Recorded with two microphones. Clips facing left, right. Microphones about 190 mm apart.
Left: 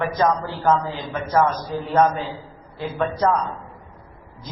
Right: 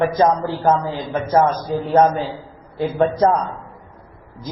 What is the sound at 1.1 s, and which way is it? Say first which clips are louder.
Speech: right 3 dB; 40° right (ahead or behind).